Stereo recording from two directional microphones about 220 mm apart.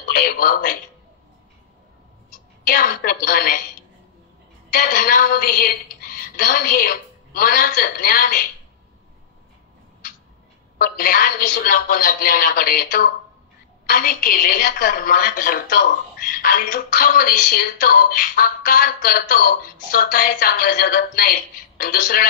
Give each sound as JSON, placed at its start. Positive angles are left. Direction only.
{"t": 0.0, "sound": "speech", "side_deg": 40}
{"t": 2.6, "sound": "a woman's voice", "side_deg": 40}
{"t": 4.6, "sound": "a woman's voice", "side_deg": 40}
{"t": 10.8, "sound": "a woman's voice", "side_deg": 40}
{"t": 13.8, "sound": "a woman's voice", "side_deg": 40}